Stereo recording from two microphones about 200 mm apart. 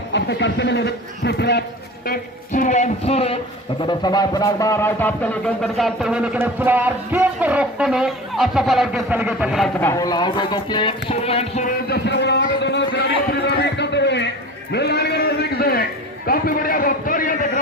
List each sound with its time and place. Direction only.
0.1 s speech: 60° left (ahead or behind)
2.0 s speech: 40° left (ahead or behind); by 9.6 s 5° right (ahead or behind)
9.8 s speech: 15° left (ahead or behind); by 11.7 s 30° left (ahead or behind)
11.9 s a sound: 60° left (ahead or behind); by 17.6 s 45° left (ahead or behind)